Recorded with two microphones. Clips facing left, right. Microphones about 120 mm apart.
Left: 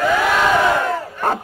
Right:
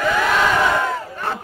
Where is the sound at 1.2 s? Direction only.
45° left (ahead or behind).